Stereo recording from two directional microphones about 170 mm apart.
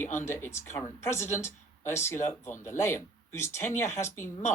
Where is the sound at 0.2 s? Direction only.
15° left (ahead or behind).